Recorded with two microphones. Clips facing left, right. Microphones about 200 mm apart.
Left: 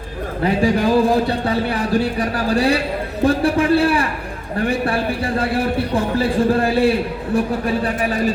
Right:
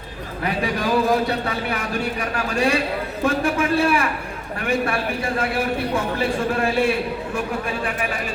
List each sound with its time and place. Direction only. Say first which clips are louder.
0.4 s speech: left 7 dB; 30° left (ahead or behind)